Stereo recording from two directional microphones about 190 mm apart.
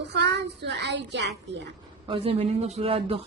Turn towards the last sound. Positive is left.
turn(degrees=-30)  # may be behind; listen again after turning